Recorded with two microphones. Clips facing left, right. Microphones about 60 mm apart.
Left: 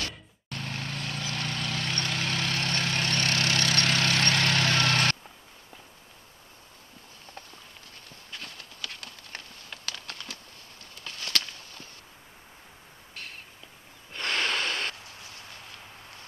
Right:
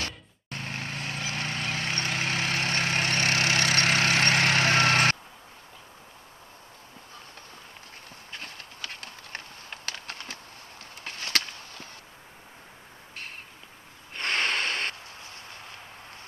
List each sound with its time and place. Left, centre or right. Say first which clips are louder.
0.0 s vehicle: right 1 dB; centre
8.3 s horse: right 1 dB; centre
14.1 s snort: right 1 dB; centre